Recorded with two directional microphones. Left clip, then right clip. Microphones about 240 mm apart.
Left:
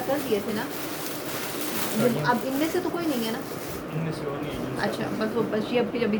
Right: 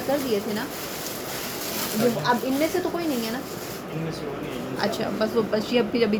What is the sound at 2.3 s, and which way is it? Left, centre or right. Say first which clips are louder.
Speech: right 2 dB; centre.